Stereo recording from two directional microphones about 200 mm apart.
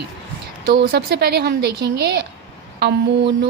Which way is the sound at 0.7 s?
55° right (ahead or behind).